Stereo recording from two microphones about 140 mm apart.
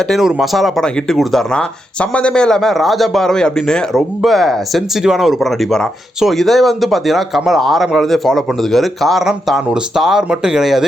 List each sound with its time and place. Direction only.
0.1 s speech: centre (ahead or behind)